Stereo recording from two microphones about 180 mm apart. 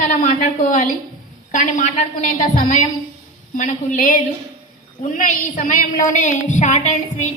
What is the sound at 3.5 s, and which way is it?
A woman's voice, 45° left (ahead or behind).